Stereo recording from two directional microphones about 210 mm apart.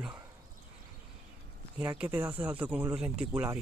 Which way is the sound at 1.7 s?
10° right (ahead or behind).